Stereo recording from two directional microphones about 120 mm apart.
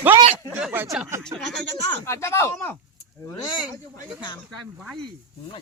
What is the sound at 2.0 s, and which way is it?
Speech, 25° left (ahead or behind).